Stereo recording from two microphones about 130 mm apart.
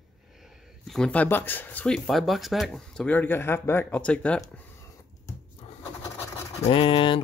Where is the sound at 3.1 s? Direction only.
15° left (ahead or behind).